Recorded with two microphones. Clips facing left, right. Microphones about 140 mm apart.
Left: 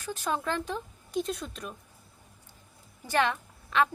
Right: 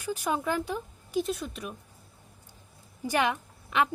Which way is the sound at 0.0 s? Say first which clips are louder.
Right 2 dB; 10° right (ahead or behind).